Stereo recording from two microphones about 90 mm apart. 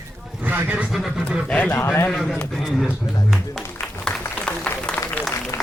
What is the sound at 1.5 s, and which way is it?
Speech, 15° left (ahead or behind).